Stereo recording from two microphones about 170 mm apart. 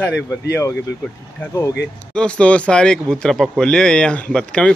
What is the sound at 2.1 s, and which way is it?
Speech, 5° left (ahead or behind).